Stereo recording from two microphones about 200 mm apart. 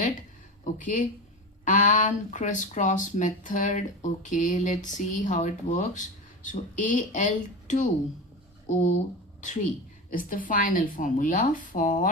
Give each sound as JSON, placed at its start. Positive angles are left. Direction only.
{"t": 0.6, "sound": "speech", "side_deg": 40}
{"t": 10.1, "sound": "speech", "side_deg": 45}